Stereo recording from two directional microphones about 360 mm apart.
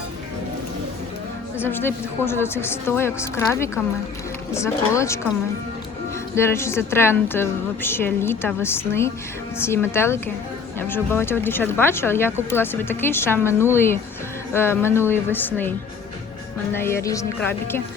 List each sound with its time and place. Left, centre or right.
1.6 s speech: centre
6.3 s speech: centre
16.7 s speech: centre